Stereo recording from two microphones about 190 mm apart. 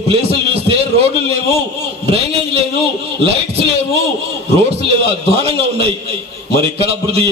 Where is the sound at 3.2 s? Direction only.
30° right (ahead or behind).